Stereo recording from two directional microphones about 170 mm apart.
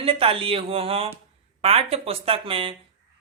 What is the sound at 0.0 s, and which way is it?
A woman's voice, 35° right (ahead or behind).